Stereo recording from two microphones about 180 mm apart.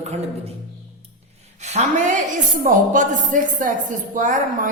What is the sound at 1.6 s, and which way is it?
A man's voice, 40° right (ahead or behind).